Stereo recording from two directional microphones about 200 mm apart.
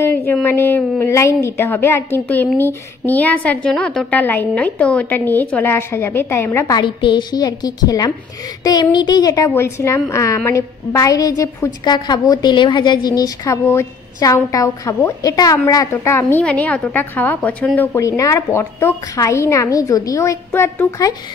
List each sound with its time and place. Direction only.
0.3 s a woman's voice: 10° left (ahead or behind)